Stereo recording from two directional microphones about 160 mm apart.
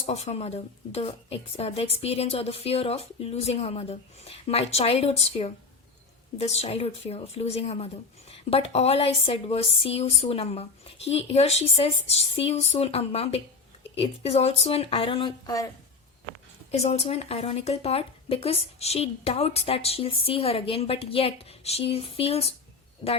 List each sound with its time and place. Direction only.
0.0 s speech: 40° left (ahead or behind)
16.7 s speech: 40° left (ahead or behind)